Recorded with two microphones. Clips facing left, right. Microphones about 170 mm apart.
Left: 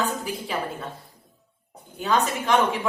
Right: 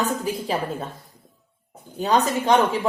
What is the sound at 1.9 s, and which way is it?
Speech, 35° right (ahead or behind).